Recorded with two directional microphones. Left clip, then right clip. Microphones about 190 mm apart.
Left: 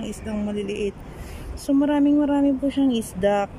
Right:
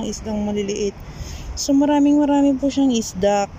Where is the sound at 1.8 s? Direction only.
Centre (ahead or behind).